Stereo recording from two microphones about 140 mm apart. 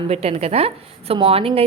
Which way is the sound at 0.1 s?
50° right (ahead or behind).